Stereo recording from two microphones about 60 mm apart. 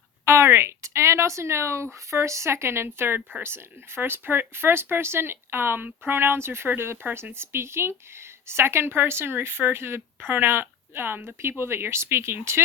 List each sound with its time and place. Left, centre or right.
0.3 s speech: right